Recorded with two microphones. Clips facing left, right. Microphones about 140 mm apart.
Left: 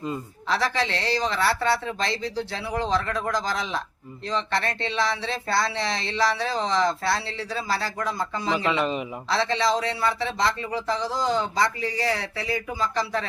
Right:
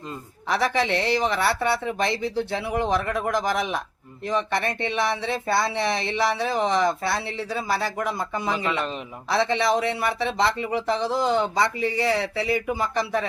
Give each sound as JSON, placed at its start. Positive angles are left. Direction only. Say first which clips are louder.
{"t": 0.5, "sound": "speech", "louder": "right 3 dB", "side_deg": -15}
{"t": 4.3, "sound": "speech", "louder": "right 2 dB", "side_deg": -15}
{"t": 11.0, "sound": "speech", "louder": "right 3 dB", "side_deg": -60}
{"t": 11.5, "sound": "speech", "louder": "right 2 dB", "side_deg": -20}